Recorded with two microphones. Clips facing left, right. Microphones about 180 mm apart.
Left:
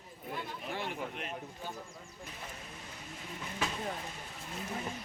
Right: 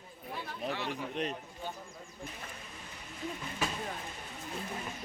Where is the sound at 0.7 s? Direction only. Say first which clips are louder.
Left 1 dB; 50° left (ahead or behind).